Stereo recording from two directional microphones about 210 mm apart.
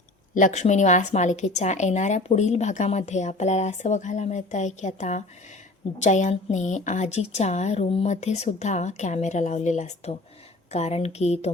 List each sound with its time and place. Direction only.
0.3 s a woman's voice: 35° left (ahead or behind)